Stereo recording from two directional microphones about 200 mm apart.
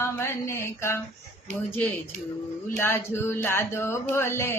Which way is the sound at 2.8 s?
10° left (ahead or behind).